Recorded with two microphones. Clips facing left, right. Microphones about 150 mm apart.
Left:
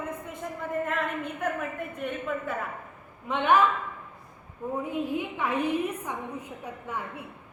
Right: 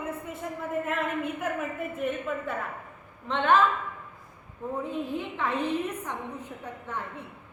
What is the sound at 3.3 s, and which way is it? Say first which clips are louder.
Speech: even; 10° left (ahead or behind).